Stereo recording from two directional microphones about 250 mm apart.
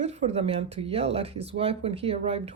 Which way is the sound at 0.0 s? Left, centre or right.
Right.